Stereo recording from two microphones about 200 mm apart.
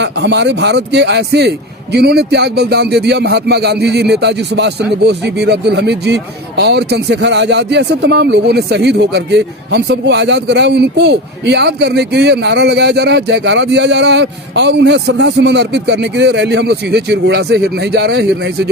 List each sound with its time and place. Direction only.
0.0 s speech: 60° right (ahead or behind)